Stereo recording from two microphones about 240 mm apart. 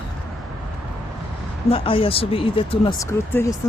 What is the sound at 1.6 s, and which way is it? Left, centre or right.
Speech, left.